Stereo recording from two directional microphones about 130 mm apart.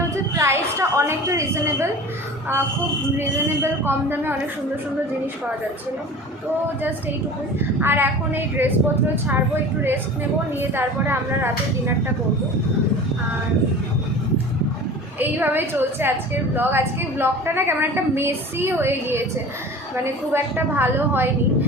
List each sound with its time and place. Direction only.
0.3 s a woman's voice: 20° right (ahead or behind)
3.2 s a woman's voice: 20° right (ahead or behind)
7.8 s a woman's voice: 15° right (ahead or behind)
10.6 s a woman's voice: 15° right (ahead or behind)
15.2 s a woman's voice: 15° right (ahead or behind)
20.3 s a woman's voice: 15° right (ahead or behind)